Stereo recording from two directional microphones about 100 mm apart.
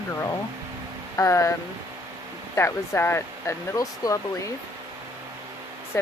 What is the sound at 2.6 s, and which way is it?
Speech, 25° left (ahead or behind).